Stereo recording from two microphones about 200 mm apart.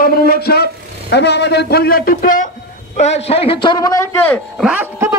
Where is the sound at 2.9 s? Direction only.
30° left (ahead or behind); by 4.3 s 15° left (ahead or behind).